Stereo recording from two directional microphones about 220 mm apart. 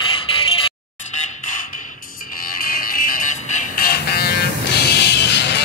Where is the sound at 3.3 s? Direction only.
40° left (ahead or behind).